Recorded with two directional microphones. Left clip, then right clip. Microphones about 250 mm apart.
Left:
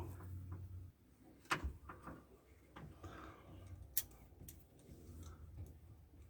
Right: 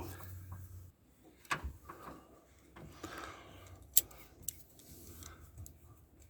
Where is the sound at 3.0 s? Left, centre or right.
Right.